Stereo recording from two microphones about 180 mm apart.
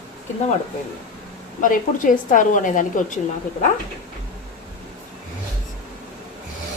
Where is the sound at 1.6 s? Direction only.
45° left (ahead or behind).